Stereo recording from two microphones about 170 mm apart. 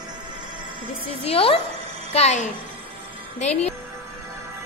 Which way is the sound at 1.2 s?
35° left (ahead or behind).